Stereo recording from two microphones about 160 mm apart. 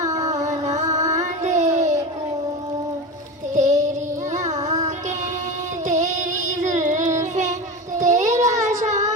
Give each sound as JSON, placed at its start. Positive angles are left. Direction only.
{"t": 0.3, "sound": "a sound", "side_deg": -45}
{"t": 0.9, "sound": "music", "side_deg": -20}
{"t": 1.1, "sound": "a sound", "side_deg": -45}
{"t": 3.5, "sound": "child singing", "side_deg": -45}
{"t": 5.9, "sound": "carnatic music", "side_deg": -45}
{"t": 7.2, "sound": "child singing", "side_deg": -50}